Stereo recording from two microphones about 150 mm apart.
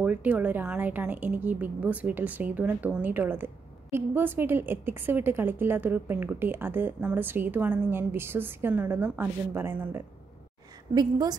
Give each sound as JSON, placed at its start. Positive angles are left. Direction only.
{"t": 0.0, "sound": "a woman's voice", "side_deg": -10}
{"t": 11.0, "sound": "a woman's voice", "side_deg": -25}